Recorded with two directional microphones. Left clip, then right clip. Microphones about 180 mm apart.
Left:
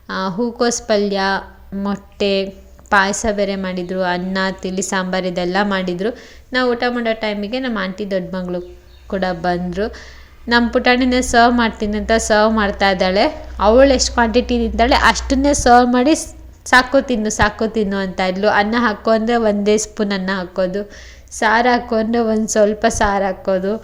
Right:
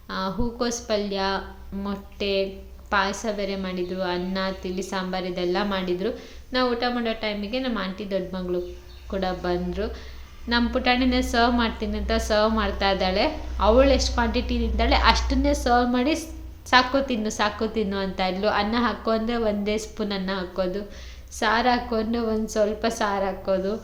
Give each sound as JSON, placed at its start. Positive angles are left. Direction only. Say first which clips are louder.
{"t": 0.1, "sound": "a woman's voice", "louder": "left 8 dB", "side_deg": 40}